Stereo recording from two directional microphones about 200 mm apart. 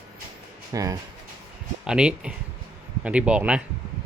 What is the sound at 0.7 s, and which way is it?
Speech, 15° right (ahead or behind).